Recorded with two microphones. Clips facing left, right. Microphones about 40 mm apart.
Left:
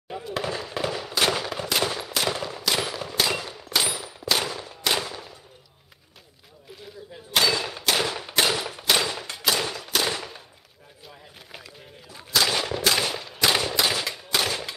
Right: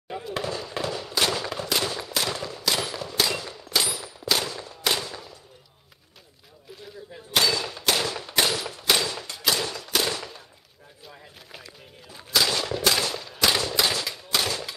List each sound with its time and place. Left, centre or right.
0.1 s fireworks: centre
0.4 s fireworks: centre
1.1 s gunshot: centre
2.1 s machine gun: centre
3.2 s a sound: centre
4.2 s a sound: centre
7.3 s machine gun: centre
7.9 s gunshot: centre
8.9 s a sound: centre
12.1 s gunshot: centre
12.5 s machine gun: centre
13.9 s gunshot: centre